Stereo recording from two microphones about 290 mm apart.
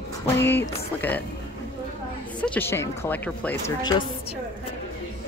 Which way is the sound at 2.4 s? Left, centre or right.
Centre.